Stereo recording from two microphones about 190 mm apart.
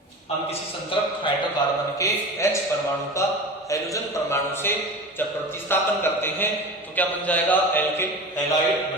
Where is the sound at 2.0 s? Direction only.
15° left (ahead or behind).